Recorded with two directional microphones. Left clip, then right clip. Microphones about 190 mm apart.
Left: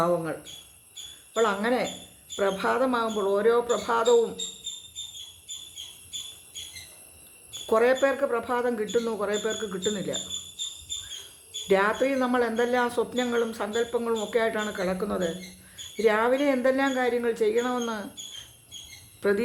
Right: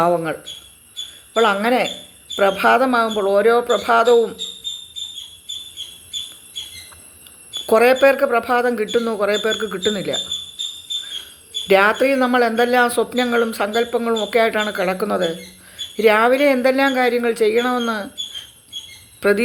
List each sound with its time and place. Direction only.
0.0 s speech: 20° right (ahead or behind)
7.7 s speech: 20° right (ahead or behind)
11.7 s speech: 15° right (ahead or behind)
19.2 s speech: 15° right (ahead or behind)